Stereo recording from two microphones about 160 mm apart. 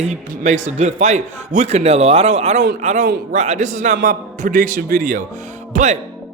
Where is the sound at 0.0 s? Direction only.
45° right (ahead or behind).